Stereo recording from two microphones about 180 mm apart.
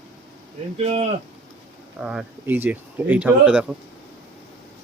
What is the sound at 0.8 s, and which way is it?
Speech, 30° right (ahead or behind).